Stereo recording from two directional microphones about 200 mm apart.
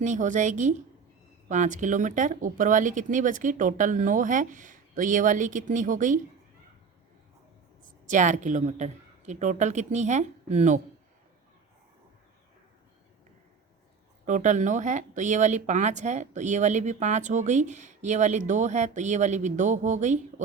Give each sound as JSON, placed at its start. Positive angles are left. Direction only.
{"t": 0.0, "sound": "speech", "side_deg": -40}
{"t": 8.0, "sound": "speech", "side_deg": -40}
{"t": 14.3, "sound": "speech", "side_deg": -40}